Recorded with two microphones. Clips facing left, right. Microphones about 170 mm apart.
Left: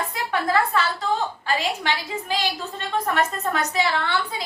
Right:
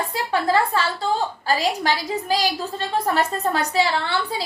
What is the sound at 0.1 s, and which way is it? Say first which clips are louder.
A woman's voice: right 4 dB; 30° right (ahead or behind).